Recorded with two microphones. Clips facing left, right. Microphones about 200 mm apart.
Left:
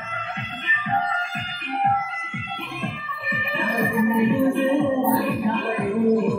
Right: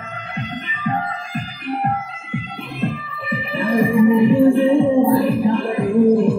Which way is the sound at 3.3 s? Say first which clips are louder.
Right 7 dB; 35° right (ahead or behind).